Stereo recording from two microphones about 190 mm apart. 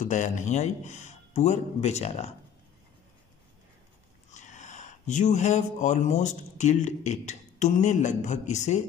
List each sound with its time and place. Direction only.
0.0 s a man's voice: 40° left (ahead or behind)
4.3 s speech: 40° left (ahead or behind)